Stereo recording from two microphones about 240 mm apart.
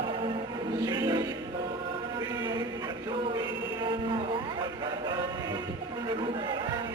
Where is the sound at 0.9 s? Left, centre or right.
Centre.